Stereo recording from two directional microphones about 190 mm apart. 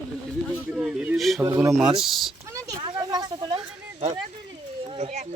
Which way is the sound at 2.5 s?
15° right (ahead or behind).